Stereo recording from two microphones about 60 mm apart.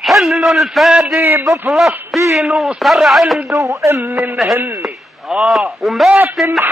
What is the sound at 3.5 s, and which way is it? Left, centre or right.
Speech, right.